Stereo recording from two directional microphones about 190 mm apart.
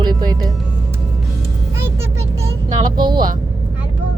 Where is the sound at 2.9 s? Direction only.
25° right (ahead or behind).